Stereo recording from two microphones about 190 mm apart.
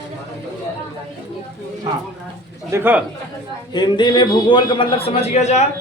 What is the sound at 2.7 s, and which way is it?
Speech, 10° right (ahead or behind).